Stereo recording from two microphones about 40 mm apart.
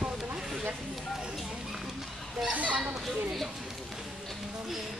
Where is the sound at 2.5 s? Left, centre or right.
Right.